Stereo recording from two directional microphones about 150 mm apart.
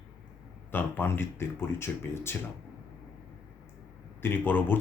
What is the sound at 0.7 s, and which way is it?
Speech, 15° left (ahead or behind).